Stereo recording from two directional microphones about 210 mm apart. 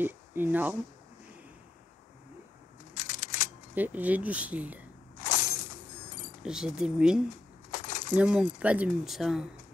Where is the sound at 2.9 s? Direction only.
35° left (ahead or behind).